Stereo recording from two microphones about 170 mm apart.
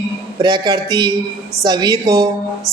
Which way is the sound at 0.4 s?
25° right (ahead or behind).